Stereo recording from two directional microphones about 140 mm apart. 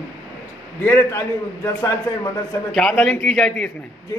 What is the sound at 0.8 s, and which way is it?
A man's voice, 20° left (ahead or behind).